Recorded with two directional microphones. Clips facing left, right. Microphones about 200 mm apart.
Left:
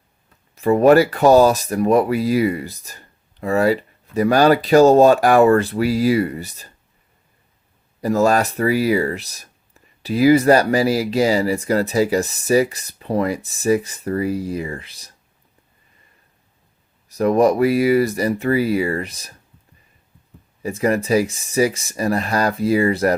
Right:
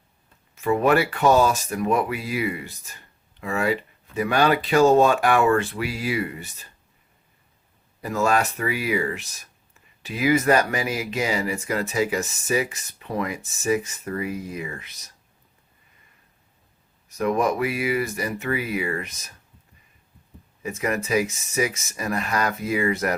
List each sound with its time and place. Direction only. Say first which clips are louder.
0.5 s speech: left 7 dB; 40° left (ahead or behind)
8.0 s speech: left 6 dB; 40° left (ahead or behind)
17.1 s speech: left 7 dB; 35° left (ahead or behind)
20.6 s speech: left 7 dB; 35° left (ahead or behind)